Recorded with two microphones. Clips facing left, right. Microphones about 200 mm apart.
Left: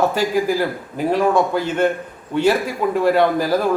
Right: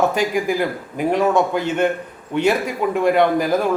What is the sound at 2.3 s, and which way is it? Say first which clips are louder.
Speech: left 1 dB; 20° right (ahead or behind).